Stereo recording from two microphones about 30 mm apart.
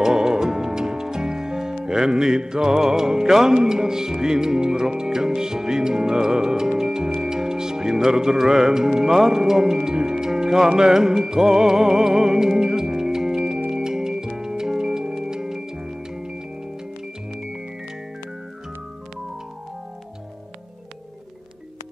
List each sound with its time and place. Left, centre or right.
0.0 s music: right
1.9 s speech: centre
3.3 s music: centre
3.5 s speech: right
7.2 s music: right